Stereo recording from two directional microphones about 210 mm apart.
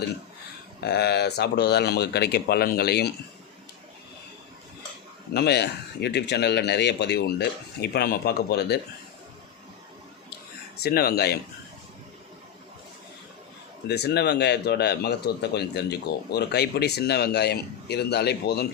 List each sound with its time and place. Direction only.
0.8 s speech: 50° left (ahead or behind)
5.3 s speech: 50° left (ahead or behind)
10.8 s speech: 50° left (ahead or behind)
13.8 s speech: 50° left (ahead or behind)